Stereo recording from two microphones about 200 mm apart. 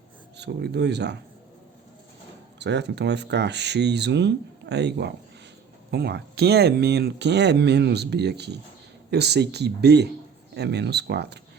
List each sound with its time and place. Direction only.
0.3 s speech: 60° right (ahead or behind)
2.6 s speech: 60° right (ahead or behind)